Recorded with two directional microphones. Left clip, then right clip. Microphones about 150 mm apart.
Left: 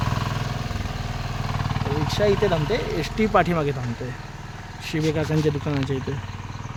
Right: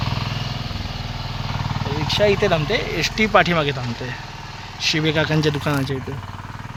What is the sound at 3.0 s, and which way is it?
Speech, 10° left (ahead or behind).